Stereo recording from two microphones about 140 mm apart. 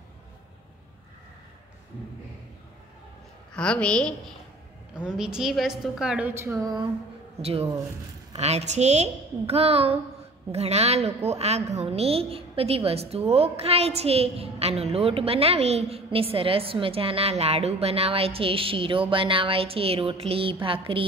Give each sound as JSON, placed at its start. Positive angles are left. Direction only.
{"t": 3.5, "sound": "a woman's voice", "side_deg": 5}
{"t": 4.9, "sound": "a woman's voice", "side_deg": -5}
{"t": 8.4, "sound": "a woman's voice", "side_deg": -50}
{"t": 20.6, "sound": "a sound", "side_deg": -40}